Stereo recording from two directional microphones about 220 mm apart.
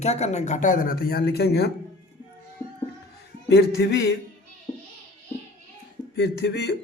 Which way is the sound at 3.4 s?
50° left (ahead or behind).